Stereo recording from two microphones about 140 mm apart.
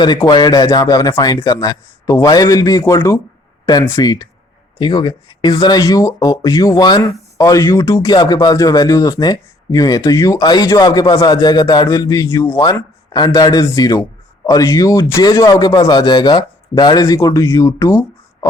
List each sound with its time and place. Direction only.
0.0 s speech: 30° left (ahead or behind)